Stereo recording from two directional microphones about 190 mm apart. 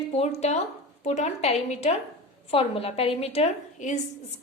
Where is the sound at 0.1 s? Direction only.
35° left (ahead or behind).